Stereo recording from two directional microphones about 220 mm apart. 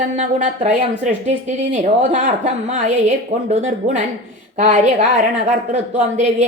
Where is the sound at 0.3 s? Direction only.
35° right (ahead or behind).